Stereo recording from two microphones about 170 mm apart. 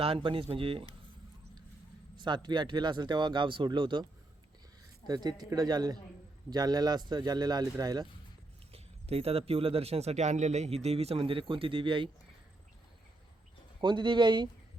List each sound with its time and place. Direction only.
0.0 s speech: 30° right (ahead or behind)
2.1 s speech: 25° right (ahead or behind)
5.0 s speech: 25° right (ahead or behind)
8.7 s speech: 35° right (ahead or behind)
13.8 s speech: 30° right (ahead or behind)